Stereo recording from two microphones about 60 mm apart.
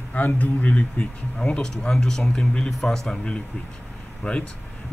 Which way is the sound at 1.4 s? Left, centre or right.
Centre.